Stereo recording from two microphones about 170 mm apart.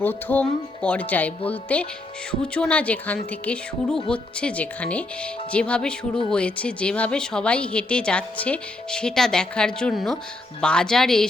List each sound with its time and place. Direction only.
0.0 s a woman's voice: 10° left (ahead or behind)